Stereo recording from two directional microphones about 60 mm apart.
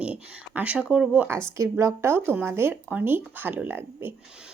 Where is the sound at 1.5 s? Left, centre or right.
Right.